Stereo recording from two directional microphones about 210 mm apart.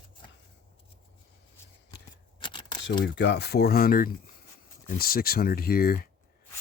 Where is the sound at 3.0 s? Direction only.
50° left (ahead or behind).